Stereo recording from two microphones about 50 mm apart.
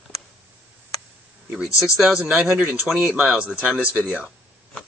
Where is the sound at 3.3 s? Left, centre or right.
Right.